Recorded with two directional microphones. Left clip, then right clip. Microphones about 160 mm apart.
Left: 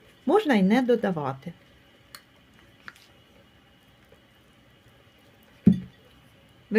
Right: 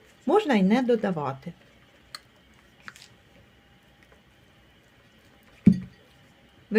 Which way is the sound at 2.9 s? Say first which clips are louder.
Right 1 dB; 5° left (ahead or behind).